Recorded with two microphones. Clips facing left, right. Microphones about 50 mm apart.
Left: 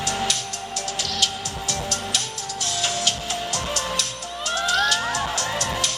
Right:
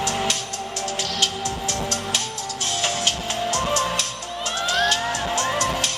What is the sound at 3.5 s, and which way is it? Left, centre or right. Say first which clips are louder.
Music: right 6 dB; right.